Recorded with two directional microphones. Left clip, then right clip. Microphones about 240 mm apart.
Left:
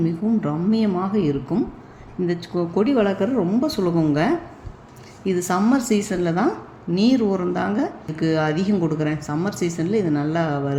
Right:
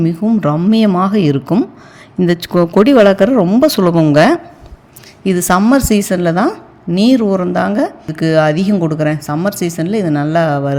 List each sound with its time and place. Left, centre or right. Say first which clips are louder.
0.0 s a woman's voice: right 8 dB; right